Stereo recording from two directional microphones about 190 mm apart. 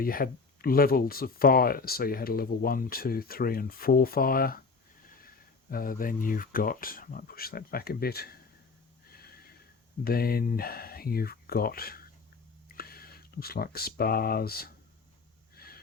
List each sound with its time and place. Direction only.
0.0 s speech: 50° left (ahead or behind)
5.7 s speech: 45° left (ahead or behind)
9.2 s snort: 50° left (ahead or behind)
10.0 s speech: 55° left (ahead or behind)
15.5 s wheeze: 50° left (ahead or behind)